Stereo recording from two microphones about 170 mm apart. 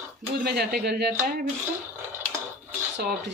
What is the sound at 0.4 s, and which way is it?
Speech, 65° right (ahead or behind).